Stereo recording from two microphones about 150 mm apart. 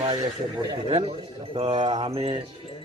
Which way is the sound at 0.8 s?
40° right (ahead or behind).